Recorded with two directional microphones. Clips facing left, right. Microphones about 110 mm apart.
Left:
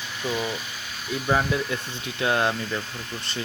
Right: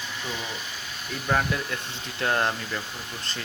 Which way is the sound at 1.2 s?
5° left (ahead or behind).